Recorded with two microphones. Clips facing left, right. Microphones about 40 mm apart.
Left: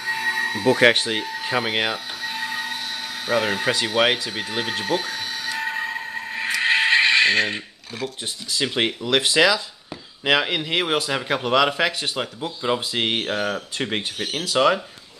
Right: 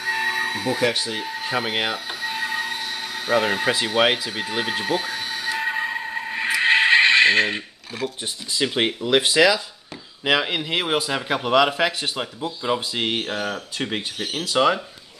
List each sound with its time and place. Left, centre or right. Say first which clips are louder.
0.0 s a sound: even; centre
0.7 s speech: left 7 dB; left
1.4 s a sound: even; centre
8.5 s a man's voice: right 1 dB; centre
9.0 s speech: right 3 dB; centre
9.3 s a man's voice: right 1 dB; centre
12.9 s a man's voice: left 1 dB; centre